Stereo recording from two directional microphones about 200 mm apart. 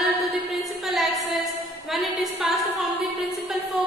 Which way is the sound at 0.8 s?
Centre (ahead or behind).